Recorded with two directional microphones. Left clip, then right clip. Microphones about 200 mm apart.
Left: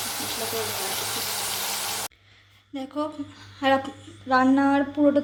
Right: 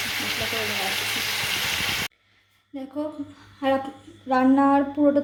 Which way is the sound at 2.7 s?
Centre (ahead or behind).